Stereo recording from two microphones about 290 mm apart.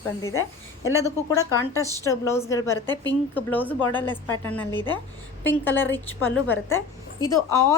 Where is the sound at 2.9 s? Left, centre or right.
Centre.